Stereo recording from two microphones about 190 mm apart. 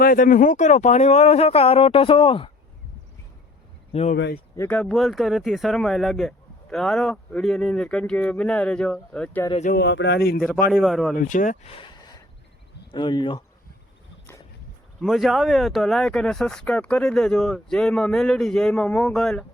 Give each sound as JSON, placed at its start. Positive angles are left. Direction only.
{"t": 0.0, "sound": "speech", "side_deg": 45}
{"t": 4.5, "sound": "speech", "side_deg": 10}
{"t": 9.6, "sound": "speech", "side_deg": 65}
{"t": 10.7, "sound": "speech", "side_deg": 0}
{"t": 11.2, "sound": "speech", "side_deg": 40}
{"t": 12.9, "sound": "speech", "side_deg": 25}
{"t": 15.0, "sound": "speech", "side_deg": 0}